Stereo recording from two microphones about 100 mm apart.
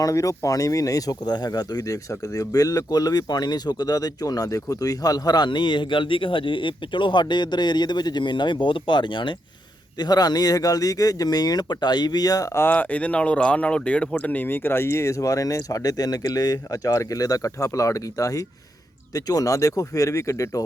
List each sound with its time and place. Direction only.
0.0 s speech: 35° left (ahead or behind); by 9.3 s 50° left (ahead or behind)
10.0 s speech: 40° left (ahead or behind)
12.6 s speech: 15° left (ahead or behind); by 20.7 s 35° left (ahead or behind)